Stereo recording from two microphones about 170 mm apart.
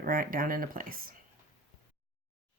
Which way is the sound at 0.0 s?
55° right (ahead or behind).